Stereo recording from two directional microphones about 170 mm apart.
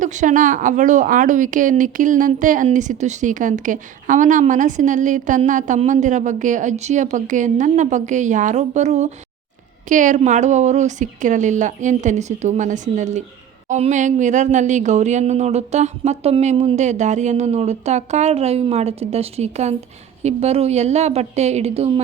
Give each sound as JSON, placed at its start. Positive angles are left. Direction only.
{"t": 0.0, "sound": "speech", "side_deg": -45}